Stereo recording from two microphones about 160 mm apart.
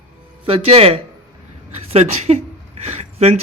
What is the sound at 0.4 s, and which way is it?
A man's voice, 35° right (ahead or behind).